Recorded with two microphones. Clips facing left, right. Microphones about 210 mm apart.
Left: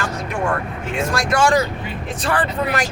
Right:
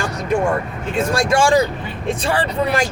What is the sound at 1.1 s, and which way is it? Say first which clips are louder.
Speech: right 2 dB; 25° right (ahead or behind).